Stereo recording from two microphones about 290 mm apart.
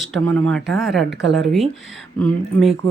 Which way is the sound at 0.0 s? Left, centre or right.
Centre.